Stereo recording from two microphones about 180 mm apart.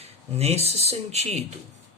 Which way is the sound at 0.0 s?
35° right (ahead or behind).